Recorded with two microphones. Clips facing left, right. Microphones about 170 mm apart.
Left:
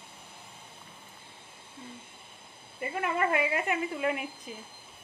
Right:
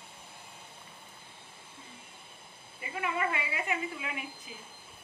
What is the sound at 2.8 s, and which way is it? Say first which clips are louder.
A woman's voice: left 4 dB; 50° left (ahead or behind).